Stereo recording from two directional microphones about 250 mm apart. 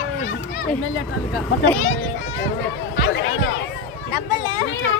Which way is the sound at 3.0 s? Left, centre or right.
Left.